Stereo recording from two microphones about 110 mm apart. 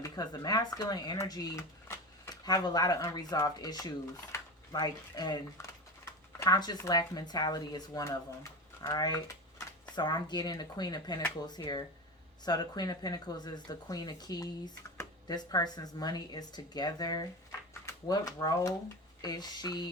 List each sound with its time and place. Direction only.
0.0 s speech: 30° left (ahead or behind)
5.6 s a sound: 25° left (ahead or behind)
6.4 s speech: 40° left (ahead or behind)